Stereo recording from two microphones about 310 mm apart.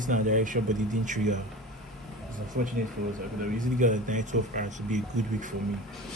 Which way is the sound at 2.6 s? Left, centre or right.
Right.